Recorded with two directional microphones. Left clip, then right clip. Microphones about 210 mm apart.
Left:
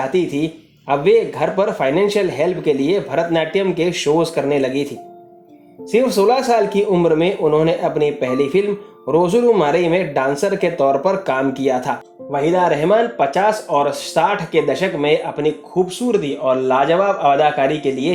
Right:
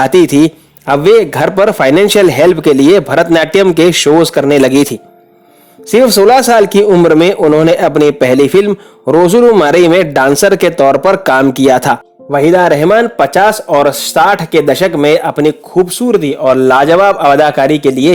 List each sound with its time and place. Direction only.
0.1 s a man's voice: 50° right (ahead or behind)